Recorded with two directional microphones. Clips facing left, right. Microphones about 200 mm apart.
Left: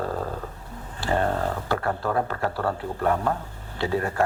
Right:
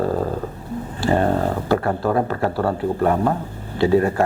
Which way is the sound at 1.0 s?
15° right (ahead or behind).